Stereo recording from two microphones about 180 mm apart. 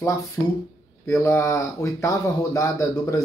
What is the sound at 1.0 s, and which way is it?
Speech, 15° left (ahead or behind).